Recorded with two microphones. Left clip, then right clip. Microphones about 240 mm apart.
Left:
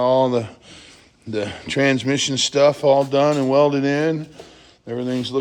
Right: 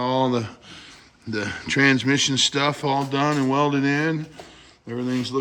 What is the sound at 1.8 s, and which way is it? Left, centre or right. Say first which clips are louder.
Speech: even; centre.